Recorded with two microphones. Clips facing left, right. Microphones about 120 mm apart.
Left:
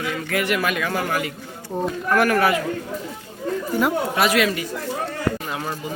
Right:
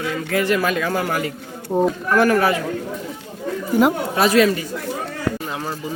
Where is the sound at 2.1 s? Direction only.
30° right (ahead or behind).